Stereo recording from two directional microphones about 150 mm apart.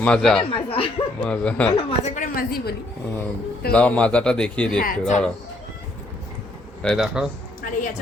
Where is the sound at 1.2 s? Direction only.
10° left (ahead or behind).